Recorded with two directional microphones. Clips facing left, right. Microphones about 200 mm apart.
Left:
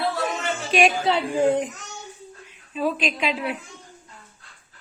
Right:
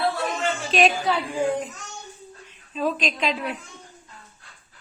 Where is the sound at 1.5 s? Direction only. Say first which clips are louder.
Left 7 dB; 20° left (ahead or behind).